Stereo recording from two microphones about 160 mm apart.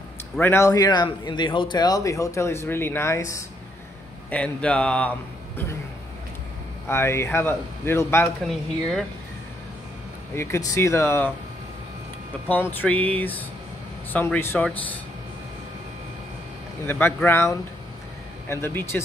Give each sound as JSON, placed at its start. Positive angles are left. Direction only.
{"t": 0.4, "sound": "a man's voice", "side_deg": 15}
{"t": 4.3, "sound": "speech", "side_deg": 5}
{"t": 6.9, "sound": "speech", "side_deg": 15}
{"t": 10.3, "sound": "speech", "side_deg": 15}
{"t": 12.4, "sound": "speech", "side_deg": 10}
{"t": 16.8, "sound": "speech", "side_deg": 15}